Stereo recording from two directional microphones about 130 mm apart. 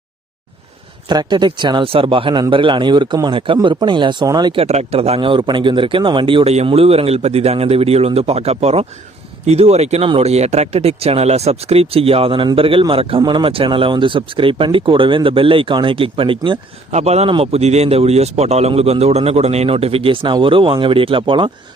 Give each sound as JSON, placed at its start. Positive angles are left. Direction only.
{"t": 1.0, "sound": "speech", "side_deg": -35}
{"t": 4.5, "sound": "speech", "side_deg": -55}
{"t": 16.9, "sound": "a man's voice", "side_deg": -55}